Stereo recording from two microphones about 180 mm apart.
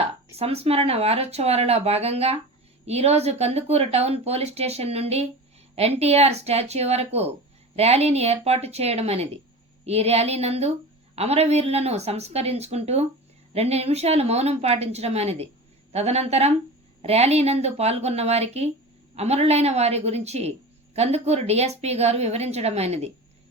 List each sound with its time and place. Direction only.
0.0 s speech: 35° right (ahead or behind)